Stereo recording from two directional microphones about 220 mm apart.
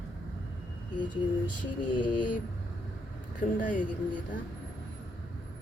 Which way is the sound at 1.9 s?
20° left (ahead or behind).